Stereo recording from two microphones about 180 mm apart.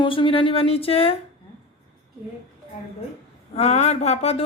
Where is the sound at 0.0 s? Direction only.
30° left (ahead or behind).